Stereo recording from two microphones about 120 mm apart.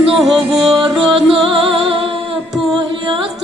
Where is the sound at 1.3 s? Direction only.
50° right (ahead or behind).